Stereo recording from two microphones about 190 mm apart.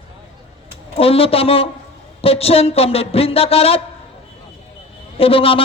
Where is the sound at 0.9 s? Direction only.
30° left (ahead or behind).